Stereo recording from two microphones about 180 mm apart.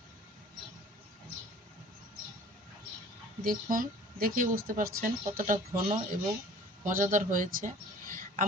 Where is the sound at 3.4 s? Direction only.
50° right (ahead or behind).